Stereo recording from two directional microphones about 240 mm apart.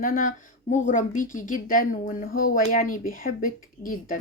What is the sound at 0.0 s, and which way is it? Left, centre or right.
A woman's voice, left.